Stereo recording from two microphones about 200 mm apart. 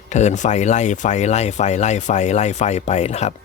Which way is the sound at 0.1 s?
35° left (ahead or behind).